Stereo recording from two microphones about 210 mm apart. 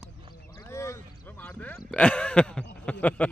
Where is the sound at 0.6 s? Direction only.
15° left (ahead or behind).